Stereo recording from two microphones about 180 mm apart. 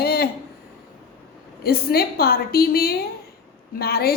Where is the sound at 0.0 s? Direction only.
60° left (ahead or behind).